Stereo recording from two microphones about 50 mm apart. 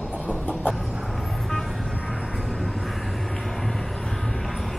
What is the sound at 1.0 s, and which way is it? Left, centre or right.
Vehicle, centre.